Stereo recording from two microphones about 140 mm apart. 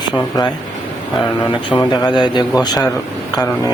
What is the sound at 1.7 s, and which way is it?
A man's voice, 30° left (ahead or behind).